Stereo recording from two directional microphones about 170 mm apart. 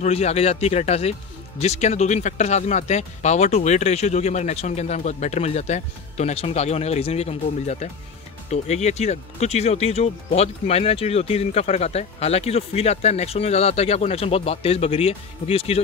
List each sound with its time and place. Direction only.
0.0 s speech: 40° left (ahead or behind)